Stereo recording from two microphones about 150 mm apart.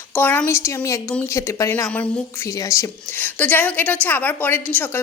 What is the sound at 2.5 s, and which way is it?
A woman's voice, 20° left (ahead or behind).